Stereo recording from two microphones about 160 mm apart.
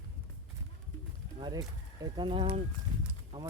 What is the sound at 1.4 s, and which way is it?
Speech, 25° right (ahead or behind).